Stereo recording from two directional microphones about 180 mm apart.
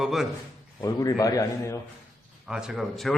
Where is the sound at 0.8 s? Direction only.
20° left (ahead or behind).